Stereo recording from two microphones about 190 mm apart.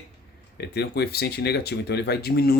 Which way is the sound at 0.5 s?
60° left (ahead or behind).